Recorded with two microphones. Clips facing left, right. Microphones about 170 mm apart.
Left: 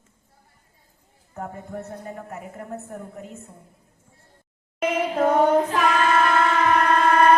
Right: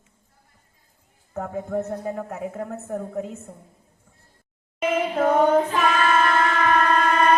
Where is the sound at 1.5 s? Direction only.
85° right.